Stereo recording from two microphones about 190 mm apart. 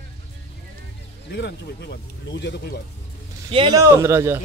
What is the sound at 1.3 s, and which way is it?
Speech, 60° left (ahead or behind).